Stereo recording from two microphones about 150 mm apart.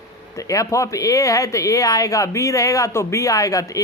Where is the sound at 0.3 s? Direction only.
20° left (ahead or behind).